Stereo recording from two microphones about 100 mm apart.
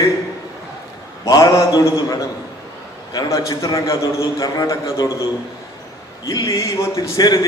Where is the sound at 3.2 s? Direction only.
30° left (ahead or behind).